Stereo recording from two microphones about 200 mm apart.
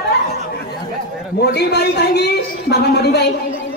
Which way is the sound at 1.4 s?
55° left (ahead or behind).